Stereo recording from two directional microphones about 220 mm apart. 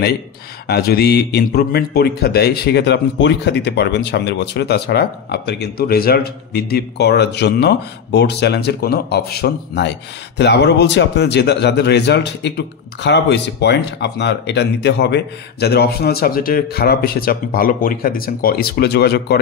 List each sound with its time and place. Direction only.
0.7 s a man's voice: 45° left (ahead or behind)